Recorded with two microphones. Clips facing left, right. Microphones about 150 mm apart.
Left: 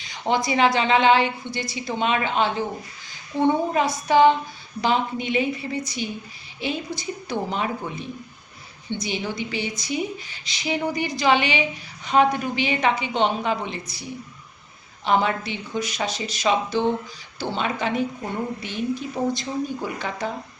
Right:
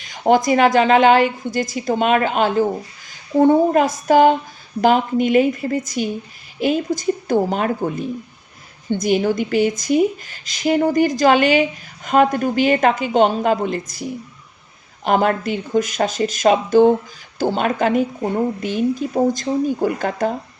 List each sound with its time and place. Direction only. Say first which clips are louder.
0.0 s speech: right 8 dB; 45° right (ahead or behind)